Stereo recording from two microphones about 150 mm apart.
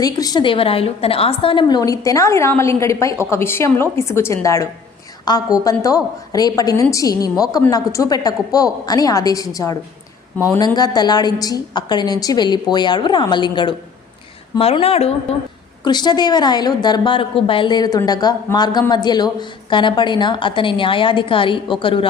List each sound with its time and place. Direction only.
0.0 s a woman's voice: 25° left (ahead or behind); by 15.1 s 40° left (ahead or behind)
15.8 s a woman's voice: 30° left (ahead or behind)